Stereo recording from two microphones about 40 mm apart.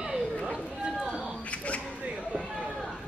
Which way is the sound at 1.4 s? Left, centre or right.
Left.